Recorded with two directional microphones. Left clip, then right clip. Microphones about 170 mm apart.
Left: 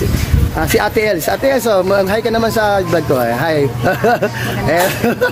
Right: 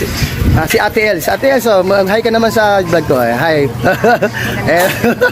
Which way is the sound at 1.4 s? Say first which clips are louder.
Right 3 dB; centre (ahead or behind).